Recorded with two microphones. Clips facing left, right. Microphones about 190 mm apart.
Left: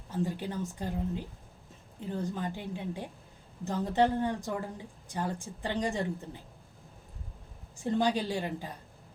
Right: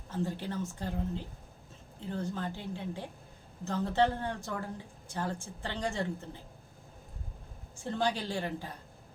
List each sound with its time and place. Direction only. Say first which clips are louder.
0.1 s a woman's voice: left 2 dB; 15° left (ahead or behind)
7.8 s a woman's voice: left 4 dB; 15° left (ahead or behind)